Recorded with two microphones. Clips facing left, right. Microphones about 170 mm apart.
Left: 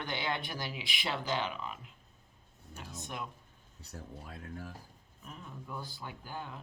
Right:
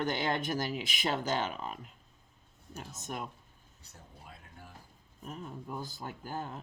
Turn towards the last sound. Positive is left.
turn(degrees=-40)  # may be behind; listen again after turning